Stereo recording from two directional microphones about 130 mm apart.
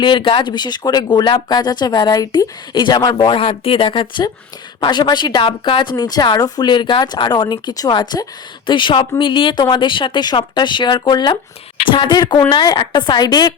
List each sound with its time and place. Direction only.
0.0 s a woman's voice: 40° left (ahead or behind)